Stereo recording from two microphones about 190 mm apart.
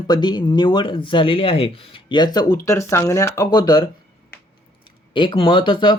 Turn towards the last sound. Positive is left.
turn(degrees=25)  # may be behind; listen again after turning